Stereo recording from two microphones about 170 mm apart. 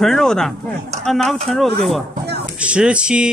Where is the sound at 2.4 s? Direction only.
5° right (ahead or behind).